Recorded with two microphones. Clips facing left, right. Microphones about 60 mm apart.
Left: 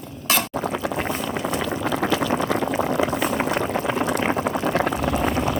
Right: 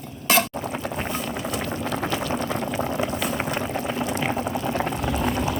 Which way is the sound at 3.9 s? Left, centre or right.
Left.